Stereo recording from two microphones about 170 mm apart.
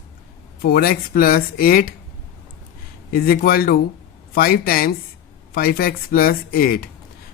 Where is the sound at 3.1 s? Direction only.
65° left (ahead or behind).